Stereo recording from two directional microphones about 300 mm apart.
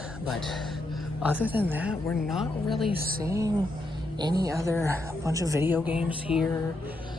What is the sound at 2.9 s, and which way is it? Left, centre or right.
Speech, right.